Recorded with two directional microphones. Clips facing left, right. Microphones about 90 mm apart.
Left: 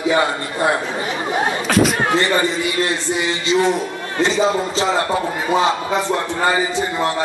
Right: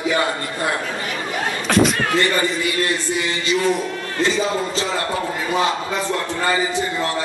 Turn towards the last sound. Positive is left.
turn(degrees=20)  # may be behind; listen again after turning